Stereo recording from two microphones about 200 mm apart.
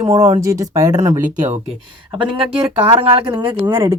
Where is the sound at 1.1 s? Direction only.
35° right (ahead or behind).